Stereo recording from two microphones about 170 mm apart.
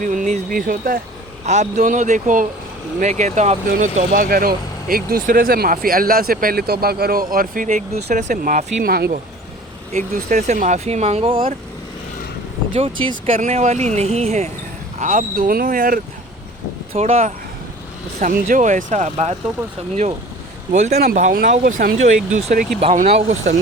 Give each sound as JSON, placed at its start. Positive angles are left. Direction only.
{"t": 0.0, "sound": "speech", "side_deg": -50}
{"t": 1.5, "sound": "speech", "side_deg": -45}
{"t": 10.2, "sound": "speech", "side_deg": -45}
{"t": 12.7, "sound": "speech", "side_deg": -30}
{"t": 16.9, "sound": "speech", "side_deg": -35}
{"t": 18.2, "sound": "speech", "side_deg": -50}
{"t": 20.7, "sound": "speech", "side_deg": -40}